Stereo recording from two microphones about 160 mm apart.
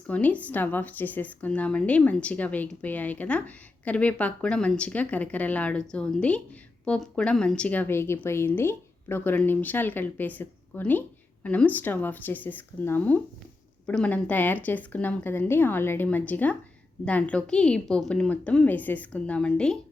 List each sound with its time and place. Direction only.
0.1 s speech: 10° left (ahead or behind)